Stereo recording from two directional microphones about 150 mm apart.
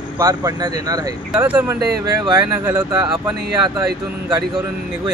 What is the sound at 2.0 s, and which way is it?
Speech, 25° right (ahead or behind).